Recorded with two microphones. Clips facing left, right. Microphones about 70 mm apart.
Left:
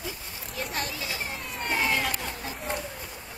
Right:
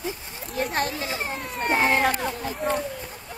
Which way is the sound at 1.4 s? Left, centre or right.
Right.